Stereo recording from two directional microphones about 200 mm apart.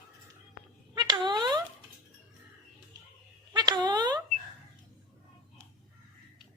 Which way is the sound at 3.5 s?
20° right (ahead or behind).